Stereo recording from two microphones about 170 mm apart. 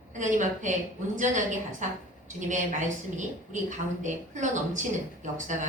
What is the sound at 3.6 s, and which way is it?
A woman's voice, 45° right (ahead or behind).